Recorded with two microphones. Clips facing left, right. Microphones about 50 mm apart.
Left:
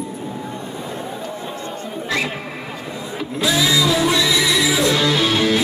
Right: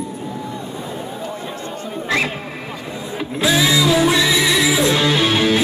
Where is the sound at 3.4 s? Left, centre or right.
Right.